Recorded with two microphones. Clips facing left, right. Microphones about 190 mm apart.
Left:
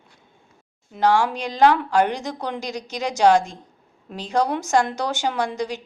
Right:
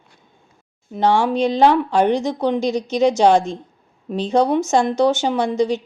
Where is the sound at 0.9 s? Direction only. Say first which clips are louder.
Right 3 dB; 20° right (ahead or behind).